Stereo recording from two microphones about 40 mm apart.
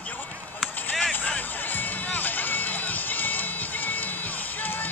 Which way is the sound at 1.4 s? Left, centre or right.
Left.